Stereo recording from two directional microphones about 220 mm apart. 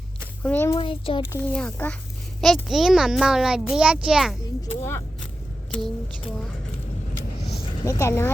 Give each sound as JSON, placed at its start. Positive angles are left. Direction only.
{"t": 0.4, "sound": "speech", "side_deg": 10}
{"t": 0.8, "sound": "a child's voice", "side_deg": 25}
{"t": 1.3, "sound": "a child's voice", "side_deg": 5}
{"t": 4.7, "sound": "speech", "side_deg": 10}
{"t": 7.6, "sound": "a woman's voice", "side_deg": 15}